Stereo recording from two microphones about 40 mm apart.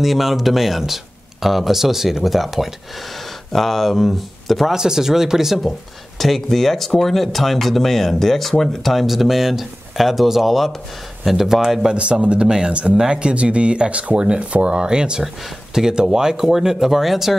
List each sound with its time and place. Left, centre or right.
0.0 s speech: centre
4.7 s speech: centre
5.7 s speech: centre
11.9 s speech: right; by 17.4 s centre